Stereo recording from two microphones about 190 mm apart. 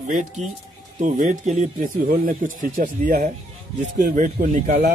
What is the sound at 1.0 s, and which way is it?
Speech, 40° right (ahead or behind).